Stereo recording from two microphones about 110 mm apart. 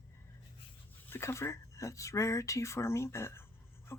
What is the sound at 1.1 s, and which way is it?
Speech, 25° left (ahead or behind).